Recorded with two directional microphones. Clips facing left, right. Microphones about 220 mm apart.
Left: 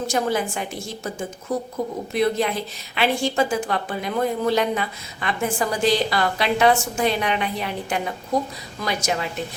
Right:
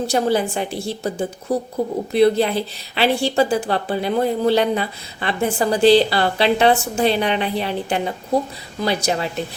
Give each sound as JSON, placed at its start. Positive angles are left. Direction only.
{"t": 0.1, "sound": "a woman's voice", "side_deg": -35}